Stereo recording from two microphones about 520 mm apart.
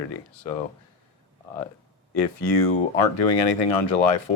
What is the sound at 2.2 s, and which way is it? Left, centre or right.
Speech, left.